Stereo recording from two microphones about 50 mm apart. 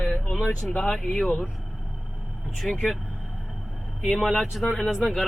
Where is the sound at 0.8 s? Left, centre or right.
Centre.